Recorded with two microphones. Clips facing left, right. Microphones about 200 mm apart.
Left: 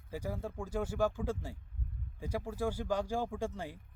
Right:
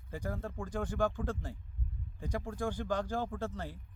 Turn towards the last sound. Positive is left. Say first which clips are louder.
# left 1 dB
turn(degrees=10)  # may be behind; listen again after turning